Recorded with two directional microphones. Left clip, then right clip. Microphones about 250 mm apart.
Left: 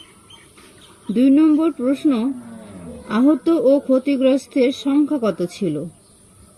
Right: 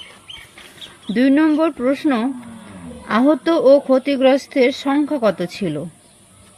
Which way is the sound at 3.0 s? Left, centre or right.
Centre.